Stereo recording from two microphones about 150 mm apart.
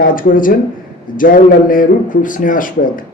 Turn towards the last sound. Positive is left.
turn(degrees=65)  # may be behind; listen again after turning